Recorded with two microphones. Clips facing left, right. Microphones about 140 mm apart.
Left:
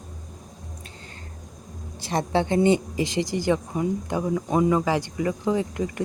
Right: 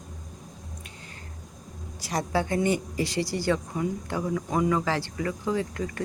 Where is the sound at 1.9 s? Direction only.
25° left (ahead or behind).